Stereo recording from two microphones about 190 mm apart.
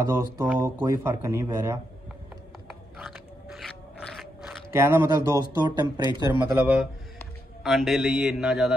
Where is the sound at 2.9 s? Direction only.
Centre (ahead or behind).